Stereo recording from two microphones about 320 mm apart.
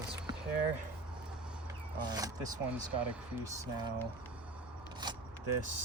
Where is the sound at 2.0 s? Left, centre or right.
Centre.